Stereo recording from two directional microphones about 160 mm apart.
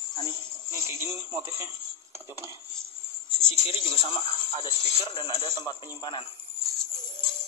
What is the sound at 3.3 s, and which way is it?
Bird, 40° right (ahead or behind).